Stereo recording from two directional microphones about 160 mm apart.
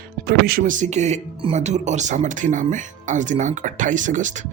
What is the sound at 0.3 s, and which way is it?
Speech, 75° right (ahead or behind).